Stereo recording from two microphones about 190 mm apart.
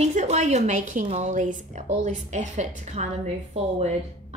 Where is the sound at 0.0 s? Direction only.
35° right (ahead or behind).